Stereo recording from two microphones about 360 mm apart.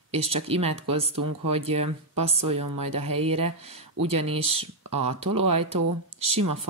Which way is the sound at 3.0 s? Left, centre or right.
Centre.